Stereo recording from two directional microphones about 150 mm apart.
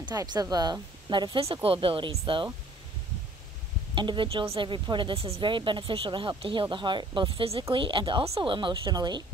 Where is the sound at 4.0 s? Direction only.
35° right (ahead or behind).